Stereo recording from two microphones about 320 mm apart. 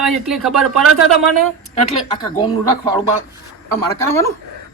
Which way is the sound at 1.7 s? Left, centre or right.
Centre.